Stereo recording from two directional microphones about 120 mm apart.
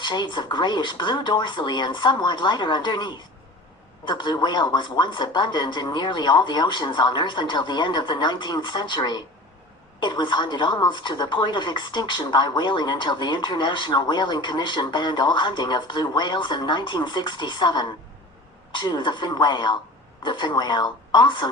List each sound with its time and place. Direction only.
0.0 s a woman's voice: 40° left (ahead or behind)